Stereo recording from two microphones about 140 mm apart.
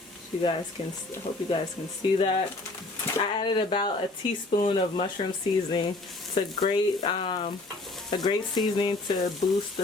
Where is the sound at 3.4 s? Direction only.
35° left (ahead or behind).